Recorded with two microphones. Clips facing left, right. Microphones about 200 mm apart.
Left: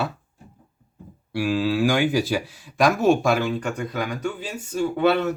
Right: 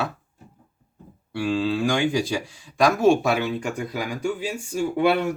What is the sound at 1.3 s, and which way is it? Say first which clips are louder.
Speech: left 1 dB; 5° left (ahead or behind).